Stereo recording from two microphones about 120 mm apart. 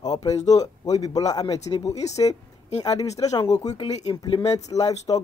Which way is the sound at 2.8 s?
30° left (ahead or behind).